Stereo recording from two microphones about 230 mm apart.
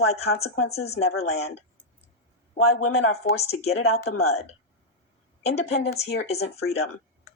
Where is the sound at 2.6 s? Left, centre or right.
Left.